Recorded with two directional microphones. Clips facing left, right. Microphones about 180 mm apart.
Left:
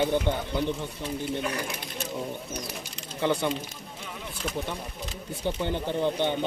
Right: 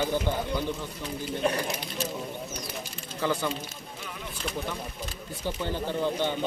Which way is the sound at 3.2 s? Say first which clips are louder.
Left 2 dB; 25° left (ahead or behind).